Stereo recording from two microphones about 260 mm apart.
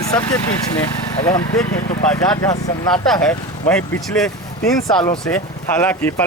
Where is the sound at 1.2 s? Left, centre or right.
Centre.